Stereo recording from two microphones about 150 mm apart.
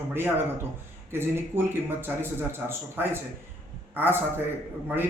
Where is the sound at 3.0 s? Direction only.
15° right (ahead or behind).